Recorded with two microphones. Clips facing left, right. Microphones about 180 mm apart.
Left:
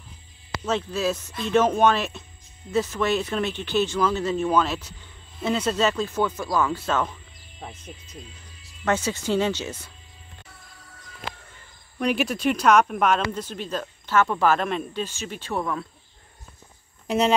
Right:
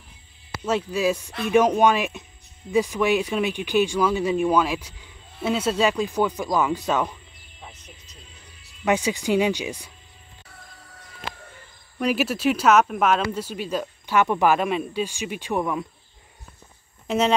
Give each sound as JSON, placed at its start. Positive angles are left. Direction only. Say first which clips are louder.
{"t": 0.7, "sound": "speech", "louder": "right 2 dB", "side_deg": -10}
{"t": 7.7, "sound": "music", "louder": "left 7 dB", "side_deg": 50}
{"t": 8.8, "sound": "speech", "louder": "right 2 dB", "side_deg": -15}
{"t": 12.0, "sound": "speech", "louder": "right 1 dB", "side_deg": -5}
{"t": 17.1, "sound": "speech", "louder": "even", "side_deg": 0}